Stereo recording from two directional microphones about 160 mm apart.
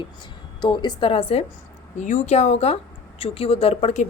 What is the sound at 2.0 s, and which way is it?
A woman's voice, 50° left (ahead or behind).